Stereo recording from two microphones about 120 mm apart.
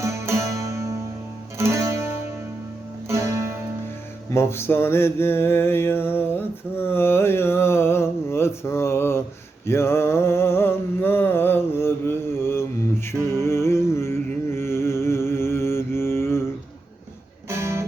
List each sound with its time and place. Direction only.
0.0 s music: 25° right (ahead or behind)
4.3 s mantra: 20° left (ahead or behind)
6.8 s a sound: 20° left (ahead or behind)
9.6 s mantra: 20° left (ahead or behind)
13.3 s music: 20° left (ahead or behind)
17.5 s music: 25° right (ahead or behind)